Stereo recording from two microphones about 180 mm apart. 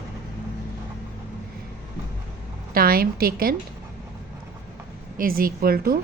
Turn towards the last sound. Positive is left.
turn(degrees=-55)  # may be behind; listen again after turning